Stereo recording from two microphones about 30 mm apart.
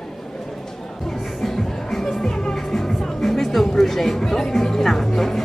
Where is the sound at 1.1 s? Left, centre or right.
Centre.